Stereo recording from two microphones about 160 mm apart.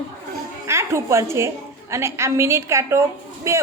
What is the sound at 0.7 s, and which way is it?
A woman's voice, 15° right (ahead or behind).